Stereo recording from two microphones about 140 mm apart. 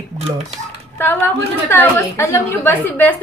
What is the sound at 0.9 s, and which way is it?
A woman's voice, 15° left (ahead or behind).